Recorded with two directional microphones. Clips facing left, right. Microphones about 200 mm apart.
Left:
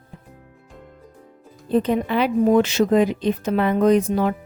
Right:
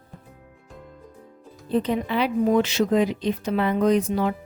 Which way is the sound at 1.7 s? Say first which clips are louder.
Left 4 dB; 50° left (ahead or behind).